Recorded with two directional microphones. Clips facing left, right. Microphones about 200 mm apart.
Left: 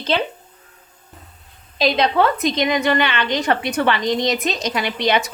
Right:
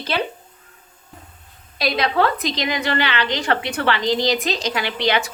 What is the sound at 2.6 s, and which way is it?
A woman's voice, 20° left (ahead or behind).